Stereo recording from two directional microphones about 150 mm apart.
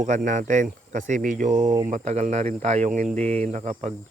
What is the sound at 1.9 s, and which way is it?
Speech, 50° right (ahead or behind).